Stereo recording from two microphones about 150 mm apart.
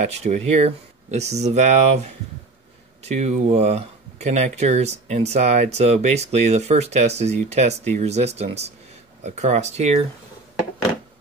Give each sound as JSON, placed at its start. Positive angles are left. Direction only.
{"t": 0.0, "sound": "speech", "side_deg": -50}